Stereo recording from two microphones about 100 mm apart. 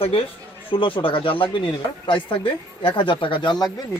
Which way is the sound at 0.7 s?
60° left (ahead or behind).